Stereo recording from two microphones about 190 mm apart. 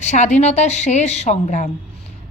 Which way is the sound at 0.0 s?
40° left (ahead or behind).